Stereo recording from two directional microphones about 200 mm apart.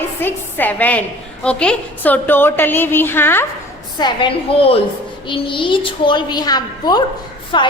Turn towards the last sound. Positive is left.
turn(degrees=25)  # may be behind; listen again after turning